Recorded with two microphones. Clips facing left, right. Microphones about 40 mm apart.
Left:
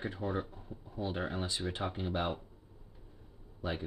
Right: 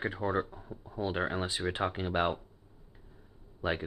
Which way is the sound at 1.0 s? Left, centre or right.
Right.